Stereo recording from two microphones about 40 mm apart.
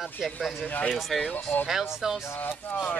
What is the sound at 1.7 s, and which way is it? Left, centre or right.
Speech, centre.